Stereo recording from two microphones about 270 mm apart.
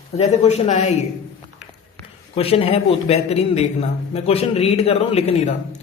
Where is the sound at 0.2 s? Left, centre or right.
Left.